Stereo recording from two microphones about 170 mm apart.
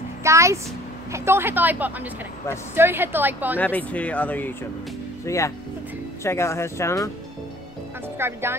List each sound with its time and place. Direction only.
0.2 s a woman's voice: 15° right (ahead or behind)
3.5 s speech: 10° left (ahead or behind)
8.2 s a woman's voice: 15° right (ahead or behind)